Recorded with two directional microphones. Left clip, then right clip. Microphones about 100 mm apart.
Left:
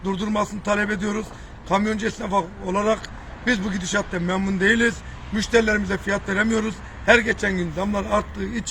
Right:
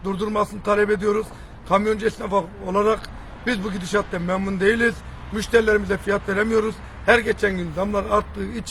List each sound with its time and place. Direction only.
0.0 s speech: 50° right (ahead or behind)